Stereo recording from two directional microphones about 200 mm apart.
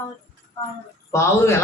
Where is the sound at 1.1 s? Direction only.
15° left (ahead or behind).